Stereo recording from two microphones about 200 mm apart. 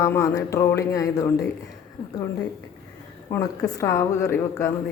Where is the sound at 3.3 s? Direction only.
15° left (ahead or behind).